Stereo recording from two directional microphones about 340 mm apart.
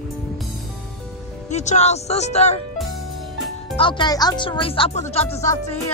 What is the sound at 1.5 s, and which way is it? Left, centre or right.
Speech, centre.